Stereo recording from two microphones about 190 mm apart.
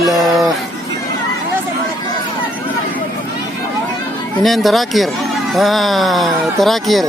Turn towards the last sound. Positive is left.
turn(degrees=0)  # may be behind; listen again after turning